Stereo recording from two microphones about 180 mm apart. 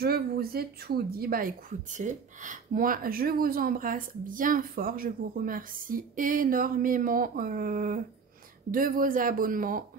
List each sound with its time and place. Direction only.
0.0 s speech: 60° right (ahead or behind)